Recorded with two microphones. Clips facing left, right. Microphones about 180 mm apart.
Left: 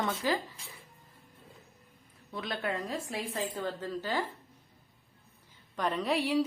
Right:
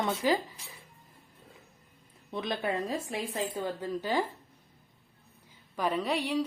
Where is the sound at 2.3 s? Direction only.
25° right (ahead or behind).